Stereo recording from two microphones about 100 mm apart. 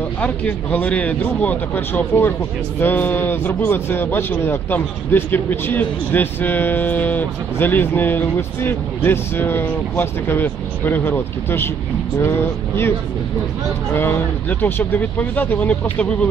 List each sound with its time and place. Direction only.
0.2 s a man's voice: 15° left (ahead or behind)
13.9 s speech: 20° left (ahead or behind)